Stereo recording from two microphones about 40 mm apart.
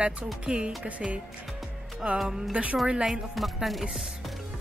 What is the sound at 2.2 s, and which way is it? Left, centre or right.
Speech, centre.